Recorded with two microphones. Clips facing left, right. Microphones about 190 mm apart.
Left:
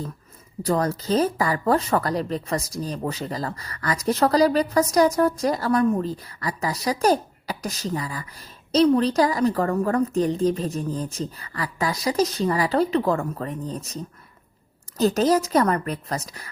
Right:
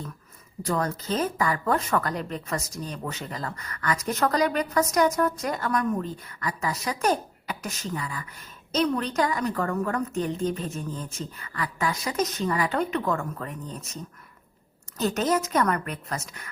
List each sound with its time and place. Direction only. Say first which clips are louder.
0.6 s speech: left 5 dB; 35° left (ahead or behind)